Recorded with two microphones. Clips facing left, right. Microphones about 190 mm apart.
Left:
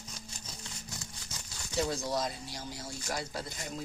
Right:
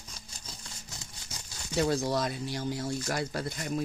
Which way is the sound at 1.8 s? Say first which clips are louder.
Right 4 dB; 70° right (ahead or behind).